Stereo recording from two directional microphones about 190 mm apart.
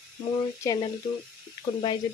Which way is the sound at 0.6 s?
20° left (ahead or behind).